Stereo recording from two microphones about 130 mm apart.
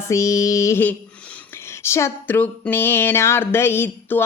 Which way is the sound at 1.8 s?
20° left (ahead or behind).